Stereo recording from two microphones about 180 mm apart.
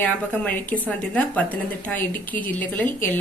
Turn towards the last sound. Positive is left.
turn(degrees=10)  # may be behind; listen again after turning